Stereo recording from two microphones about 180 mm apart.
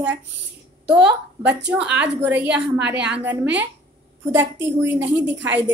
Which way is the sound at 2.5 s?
75° right (ahead or behind).